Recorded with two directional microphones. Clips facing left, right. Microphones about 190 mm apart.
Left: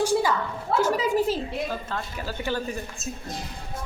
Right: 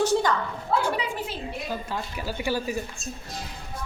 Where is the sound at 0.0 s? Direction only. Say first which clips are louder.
Even; 10° left (ahead or behind).